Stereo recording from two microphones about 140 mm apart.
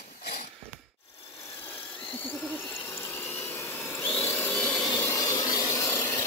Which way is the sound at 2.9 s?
15° left (ahead or behind).